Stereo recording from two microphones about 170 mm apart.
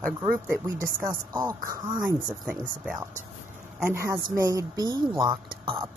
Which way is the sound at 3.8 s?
15° right (ahead or behind).